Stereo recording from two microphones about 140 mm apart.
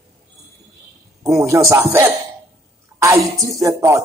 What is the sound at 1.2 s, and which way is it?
Speech, 20° right (ahead or behind).